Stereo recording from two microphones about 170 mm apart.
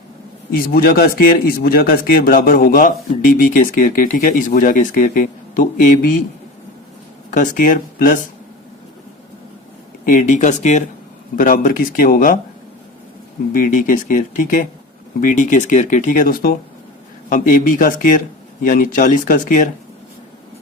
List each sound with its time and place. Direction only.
0.5 s speech: 60° left (ahead or behind)
7.3 s speech: 50° left (ahead or behind)
10.1 s speech: 45° left (ahead or behind)
11.3 s speech: 55° left (ahead or behind)
13.5 s speech: 50° left (ahead or behind)